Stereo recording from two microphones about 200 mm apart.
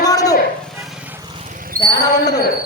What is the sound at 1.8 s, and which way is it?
Speech, 45° right (ahead or behind).